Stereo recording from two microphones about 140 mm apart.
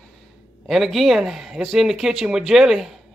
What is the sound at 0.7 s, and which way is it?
Speech, centre (ahead or behind).